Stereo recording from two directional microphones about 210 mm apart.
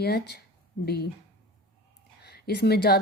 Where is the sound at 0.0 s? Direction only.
50° left (ahead or behind).